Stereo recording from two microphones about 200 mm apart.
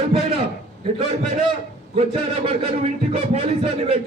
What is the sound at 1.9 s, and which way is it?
A man's voice, 30° right (ahead or behind).